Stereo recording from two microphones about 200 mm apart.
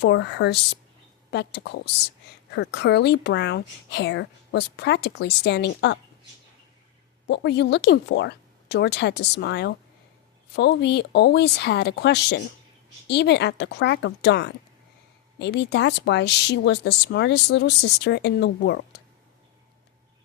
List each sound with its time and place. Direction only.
0.0 s a woman's voice: 60° left (ahead or behind)
7.3 s a woman's voice: 60° left (ahead or behind)